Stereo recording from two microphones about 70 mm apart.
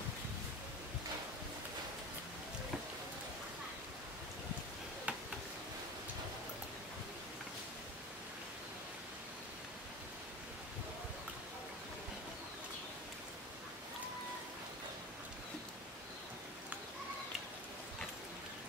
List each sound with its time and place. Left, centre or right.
5.1 s tick-tock: centre